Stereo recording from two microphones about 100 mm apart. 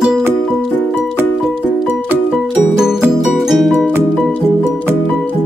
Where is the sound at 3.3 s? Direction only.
Centre (ahead or behind).